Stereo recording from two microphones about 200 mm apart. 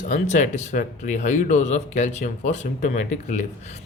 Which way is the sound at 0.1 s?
35° left (ahead or behind).